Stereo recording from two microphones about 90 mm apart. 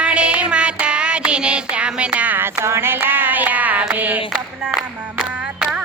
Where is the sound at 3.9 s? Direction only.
20° right (ahead or behind).